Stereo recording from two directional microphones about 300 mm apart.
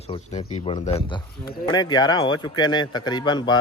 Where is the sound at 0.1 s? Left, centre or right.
Centre.